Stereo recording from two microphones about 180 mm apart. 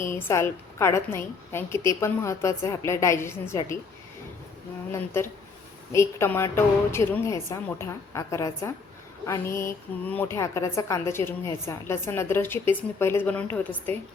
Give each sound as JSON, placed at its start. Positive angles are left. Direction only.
{"t": 0.1, "sound": "a woman's voice", "side_deg": 15}
{"t": 4.9, "sound": "a woman's voice", "side_deg": 15}